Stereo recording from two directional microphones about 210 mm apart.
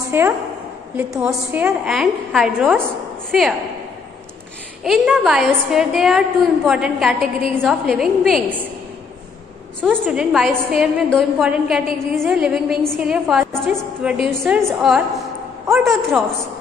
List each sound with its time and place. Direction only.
0.1 s a woman's voice: 10° right (ahead or behind)
4.8 s a woman's voice: centre (ahead or behind)
9.8 s a woman's voice: 10° right (ahead or behind)